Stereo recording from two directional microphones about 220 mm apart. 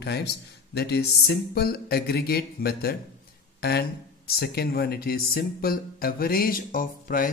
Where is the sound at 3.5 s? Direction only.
45° left (ahead or behind).